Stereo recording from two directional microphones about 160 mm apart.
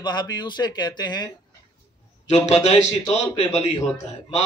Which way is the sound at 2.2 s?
45° left (ahead or behind).